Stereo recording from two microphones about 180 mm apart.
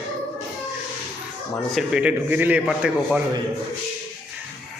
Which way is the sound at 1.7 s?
5° right (ahead or behind).